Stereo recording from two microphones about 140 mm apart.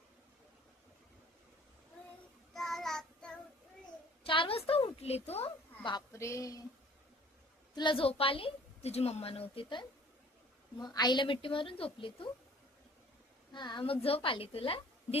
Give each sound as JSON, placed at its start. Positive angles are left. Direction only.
{"t": 2.5, "sound": "child singing", "side_deg": 0}
{"t": 4.2, "sound": "a sound", "side_deg": 40}
{"t": 6.1, "sound": "speech", "side_deg": 20}
{"t": 7.8, "sound": "a woman's voice", "side_deg": 35}
{"t": 13.5, "sound": "a woman's voice", "side_deg": 30}